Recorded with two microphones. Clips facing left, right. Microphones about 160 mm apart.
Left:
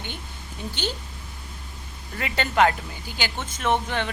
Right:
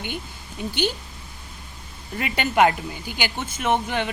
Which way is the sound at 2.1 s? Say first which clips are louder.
Right 2 dB; 15° right (ahead or behind).